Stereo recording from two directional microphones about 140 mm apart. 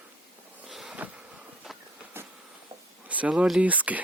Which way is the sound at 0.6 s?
Centre (ahead or behind).